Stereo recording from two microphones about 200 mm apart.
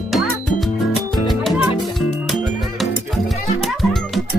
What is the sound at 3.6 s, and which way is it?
Music, centre (ahead or behind).